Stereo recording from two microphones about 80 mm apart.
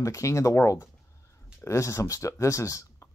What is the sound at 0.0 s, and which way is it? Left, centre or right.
Speech, left.